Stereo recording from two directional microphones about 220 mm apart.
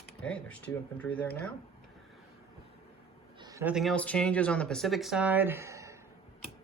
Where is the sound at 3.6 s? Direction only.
Centre (ahead or behind).